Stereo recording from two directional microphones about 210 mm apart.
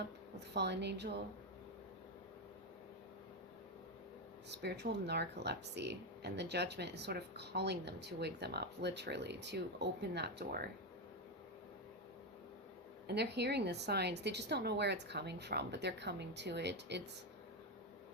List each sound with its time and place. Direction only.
0.3 s speech: 55° right (ahead or behind)
4.5 s speech: 50° right (ahead or behind)
13.1 s speech: 50° right (ahead or behind)